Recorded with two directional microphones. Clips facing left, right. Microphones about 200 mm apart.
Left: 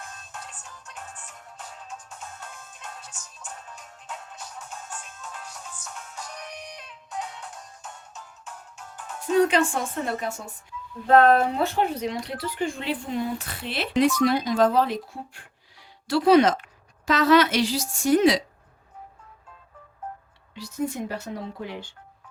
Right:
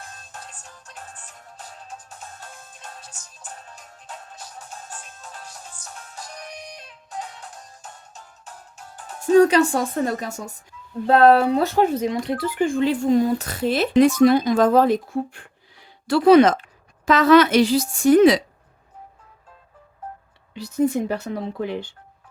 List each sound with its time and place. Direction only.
0.0 s music: 35° right (ahead or behind)
9.2 s a woman's voice: 40° right (ahead or behind)
20.6 s speech: 60° right (ahead or behind)